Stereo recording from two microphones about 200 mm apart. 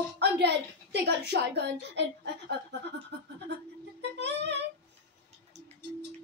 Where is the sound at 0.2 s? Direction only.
55° right (ahead or behind).